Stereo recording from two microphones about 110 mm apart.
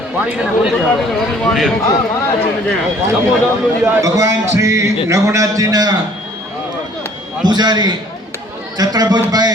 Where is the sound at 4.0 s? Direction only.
30° right (ahead or behind).